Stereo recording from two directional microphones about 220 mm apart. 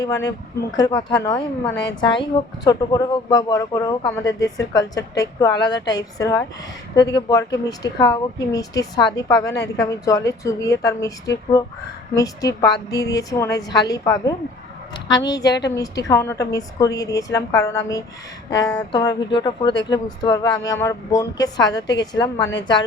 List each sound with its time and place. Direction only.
0.0 s speech: 15° left (ahead or behind)